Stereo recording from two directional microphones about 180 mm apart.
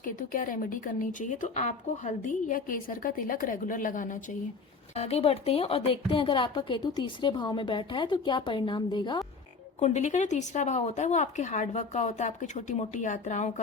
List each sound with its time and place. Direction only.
0.0 s speech: 45° left (ahead or behind)
4.9 s a woman's voice: 35° left (ahead or behind)
9.8 s a woman's voice: 40° left (ahead or behind)